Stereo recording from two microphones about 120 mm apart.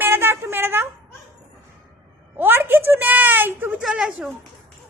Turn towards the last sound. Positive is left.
turn(degrees=-5)  # may be behind; listen again after turning